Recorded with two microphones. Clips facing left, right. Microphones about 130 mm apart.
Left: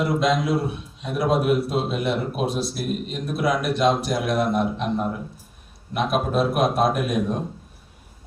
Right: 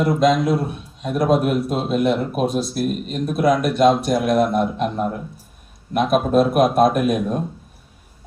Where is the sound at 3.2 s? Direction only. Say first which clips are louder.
Right 5 dB; 50° right (ahead or behind).